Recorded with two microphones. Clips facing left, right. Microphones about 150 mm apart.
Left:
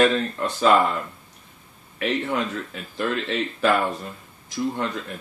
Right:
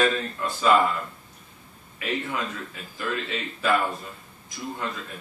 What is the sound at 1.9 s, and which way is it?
Speech, 75° left (ahead or behind).